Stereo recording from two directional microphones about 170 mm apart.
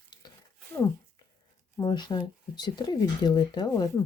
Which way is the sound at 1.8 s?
25° left (ahead or behind).